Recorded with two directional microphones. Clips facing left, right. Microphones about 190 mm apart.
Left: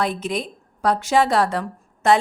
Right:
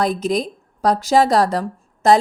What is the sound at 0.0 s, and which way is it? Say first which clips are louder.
A woman's voice: right 5 dB; 40° right (ahead or behind).